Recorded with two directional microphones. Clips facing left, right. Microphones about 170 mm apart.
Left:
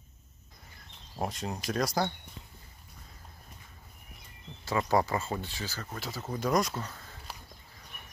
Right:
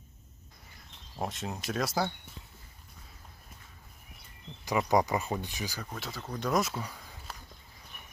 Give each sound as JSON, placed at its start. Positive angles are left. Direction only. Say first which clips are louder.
{"t": 1.1, "sound": "speech", "louder": "left 1 dB", "side_deg": 0}
{"t": 4.6, "sound": "speech", "louder": "right 1 dB", "side_deg": -15}
{"t": 5.9, "sound": "speech", "louder": "left 2 dB", "side_deg": 0}